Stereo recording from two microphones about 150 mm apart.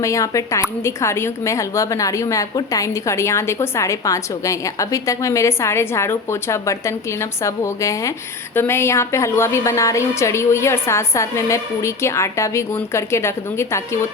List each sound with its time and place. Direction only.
0.0 s a woman's voice: 20° left (ahead or behind)